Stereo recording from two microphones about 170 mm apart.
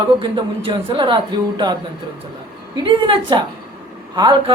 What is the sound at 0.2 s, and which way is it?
A man's voice, 30° right (ahead or behind).